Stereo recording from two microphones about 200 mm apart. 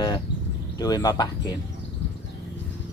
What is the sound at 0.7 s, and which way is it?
Speech, 20° left (ahead or behind).